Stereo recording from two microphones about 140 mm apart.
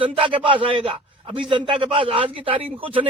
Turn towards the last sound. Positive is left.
turn(degrees=-40)  # may be behind; listen again after turning